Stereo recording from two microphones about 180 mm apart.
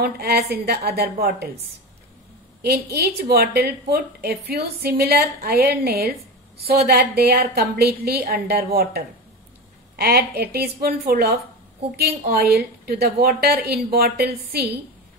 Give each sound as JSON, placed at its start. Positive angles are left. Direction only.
{"t": 0.0, "sound": "a woman's voice", "side_deg": -60}
{"t": 2.6, "sound": "a woman's voice", "side_deg": -60}